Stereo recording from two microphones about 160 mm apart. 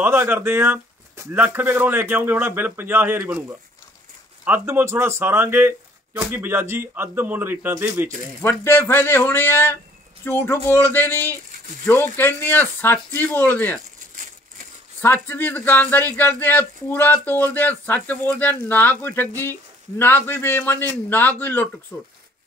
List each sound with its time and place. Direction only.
0.0 s speech: 15° right (ahead or behind)
8.4 s speech: 15° left (ahead or behind)
13.9 s crumpling: 55° right (ahead or behind)
15.2 s speech: 15° left (ahead or behind)